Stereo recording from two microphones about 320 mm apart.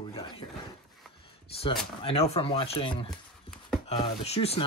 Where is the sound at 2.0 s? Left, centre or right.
Centre.